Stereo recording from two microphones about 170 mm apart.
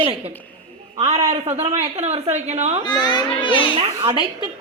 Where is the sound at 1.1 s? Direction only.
40° right (ahead or behind).